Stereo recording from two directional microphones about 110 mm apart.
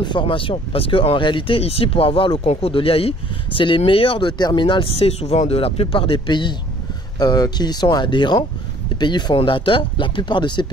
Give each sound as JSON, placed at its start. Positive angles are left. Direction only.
{"t": 0.0, "sound": "speech", "side_deg": 45}
{"t": 1.6, "sound": "speech", "side_deg": 65}